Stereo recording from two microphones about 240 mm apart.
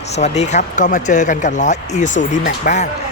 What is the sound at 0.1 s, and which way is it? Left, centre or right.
Speech, left.